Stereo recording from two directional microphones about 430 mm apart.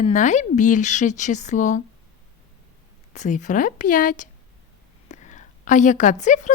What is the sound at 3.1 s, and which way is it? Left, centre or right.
A woman's voice, centre.